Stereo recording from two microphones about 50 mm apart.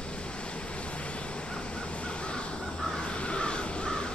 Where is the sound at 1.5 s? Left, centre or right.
Left.